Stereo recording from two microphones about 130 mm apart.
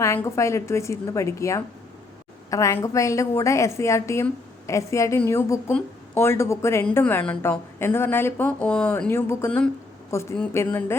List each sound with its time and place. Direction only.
0.0 s a woman's voice: 20° left (ahead or behind)